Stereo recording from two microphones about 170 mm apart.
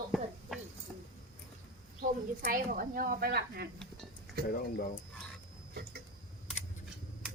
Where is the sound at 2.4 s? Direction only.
55° right (ahead or behind).